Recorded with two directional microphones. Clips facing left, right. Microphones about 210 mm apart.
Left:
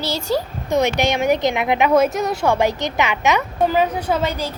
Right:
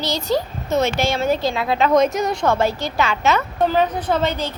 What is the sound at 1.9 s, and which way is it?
A woman's voice, 5° left (ahead or behind).